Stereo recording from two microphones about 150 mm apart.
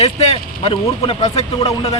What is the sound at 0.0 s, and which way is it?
A man's voice, 45° left (ahead or behind).